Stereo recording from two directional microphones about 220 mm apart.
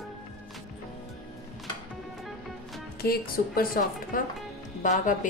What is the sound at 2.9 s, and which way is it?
A woman's voice, 45° left (ahead or behind).